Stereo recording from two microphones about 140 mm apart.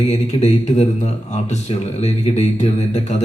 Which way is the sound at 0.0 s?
55° left (ahead or behind).